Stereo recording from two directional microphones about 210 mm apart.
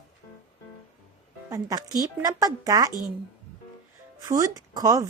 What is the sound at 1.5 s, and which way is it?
Speech, 15° right (ahead or behind).